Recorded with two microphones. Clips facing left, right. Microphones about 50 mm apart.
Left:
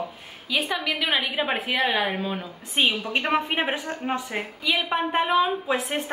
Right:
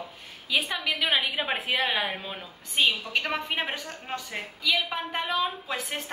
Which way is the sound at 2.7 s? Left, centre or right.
Left.